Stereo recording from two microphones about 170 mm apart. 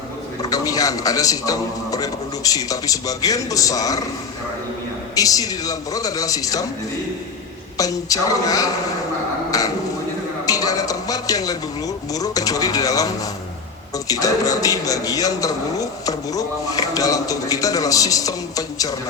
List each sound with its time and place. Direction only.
0.4 s a man's voice: 20° left (ahead or behind)
5.1 s a man's voice: 20° left (ahead or behind)
7.8 s a man's voice: 20° left (ahead or behind)